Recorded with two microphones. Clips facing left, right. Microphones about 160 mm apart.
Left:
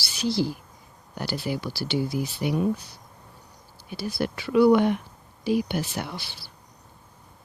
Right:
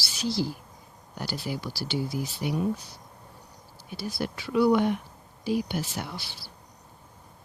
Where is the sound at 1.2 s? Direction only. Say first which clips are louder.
Left 4 dB; 65° left (ahead or behind).